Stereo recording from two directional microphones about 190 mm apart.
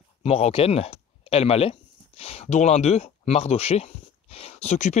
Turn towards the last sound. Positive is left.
turn(degrees=35)  # may be behind; listen again after turning